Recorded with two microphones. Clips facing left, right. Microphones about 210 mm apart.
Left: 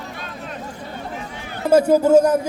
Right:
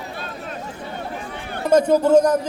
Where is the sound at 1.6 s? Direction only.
10° left (ahead or behind).